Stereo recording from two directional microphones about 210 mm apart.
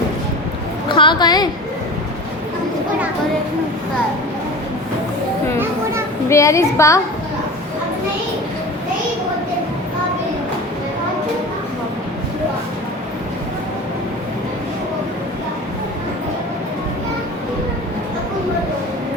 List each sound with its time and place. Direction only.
0.9 s a woman's voice: 20° left (ahead or behind)
6.2 s a woman's voice: 15° left (ahead or behind)